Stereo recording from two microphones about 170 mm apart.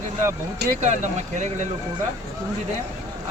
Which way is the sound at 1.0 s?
45° right (ahead or behind).